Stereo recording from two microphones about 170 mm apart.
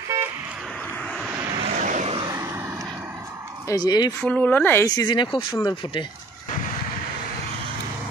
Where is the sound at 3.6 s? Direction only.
20° left (ahead or behind).